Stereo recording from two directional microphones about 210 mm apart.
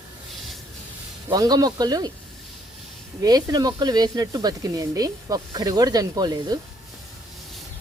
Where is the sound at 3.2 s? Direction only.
20° right (ahead or behind).